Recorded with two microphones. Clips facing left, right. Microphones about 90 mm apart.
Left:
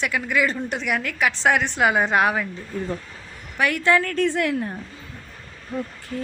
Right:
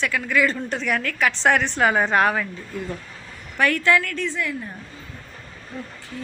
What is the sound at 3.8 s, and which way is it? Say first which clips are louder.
Speech: left 2 dB; 25° left (ahead or behind).